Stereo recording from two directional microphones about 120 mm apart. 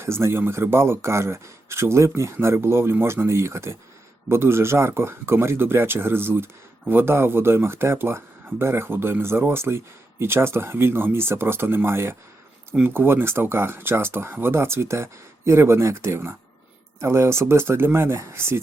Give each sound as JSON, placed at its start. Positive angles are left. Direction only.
{"t": 0.0, "sound": "speech", "side_deg": -20}